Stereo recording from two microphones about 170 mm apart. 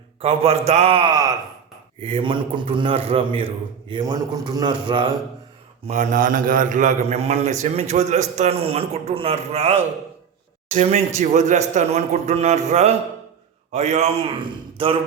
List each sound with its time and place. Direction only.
0.2 s a man's voice: 35° right (ahead or behind)
5.8 s a man's voice: 45° right (ahead or behind); by 14.9 s 30° right (ahead or behind)